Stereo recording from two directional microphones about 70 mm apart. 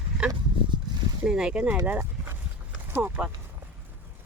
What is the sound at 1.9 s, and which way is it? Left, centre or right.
Dog, right.